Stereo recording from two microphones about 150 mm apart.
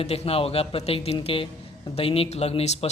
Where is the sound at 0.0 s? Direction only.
40° left (ahead or behind).